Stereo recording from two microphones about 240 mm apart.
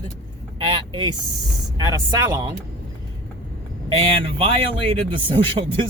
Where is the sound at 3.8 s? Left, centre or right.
Right.